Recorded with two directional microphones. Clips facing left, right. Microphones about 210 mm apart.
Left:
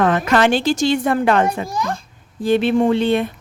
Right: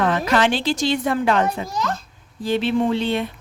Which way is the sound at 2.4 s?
55° left (ahead or behind).